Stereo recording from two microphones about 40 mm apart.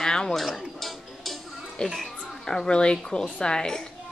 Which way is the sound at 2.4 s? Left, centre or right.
Centre.